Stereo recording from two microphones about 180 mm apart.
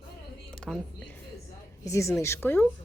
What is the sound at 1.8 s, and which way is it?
Speech, 15° left (ahead or behind).